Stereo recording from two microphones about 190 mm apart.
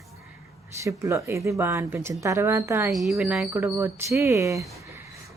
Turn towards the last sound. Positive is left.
turn(degrees=-15)  # may be behind; listen again after turning